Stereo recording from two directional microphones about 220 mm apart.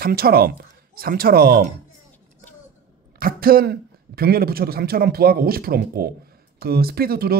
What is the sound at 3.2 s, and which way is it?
Speech, 40° right (ahead or behind).